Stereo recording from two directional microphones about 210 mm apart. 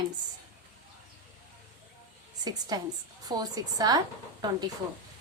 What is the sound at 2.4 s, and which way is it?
A woman's voice, 20° right (ahead or behind).